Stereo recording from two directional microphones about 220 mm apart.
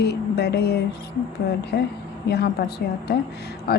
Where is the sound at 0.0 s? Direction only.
50° left (ahead or behind).